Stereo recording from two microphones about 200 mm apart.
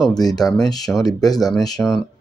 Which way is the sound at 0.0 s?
20° left (ahead or behind).